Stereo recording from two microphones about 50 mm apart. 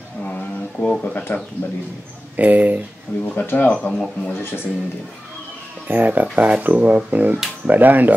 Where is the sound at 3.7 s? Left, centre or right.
Left.